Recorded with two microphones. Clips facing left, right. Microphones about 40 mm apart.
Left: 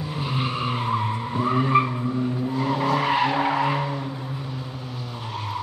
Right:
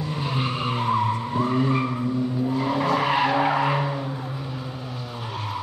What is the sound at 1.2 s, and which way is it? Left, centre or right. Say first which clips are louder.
Skidding: even; centre.